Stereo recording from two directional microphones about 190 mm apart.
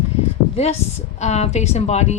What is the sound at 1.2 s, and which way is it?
Speech, 35° left (ahead or behind).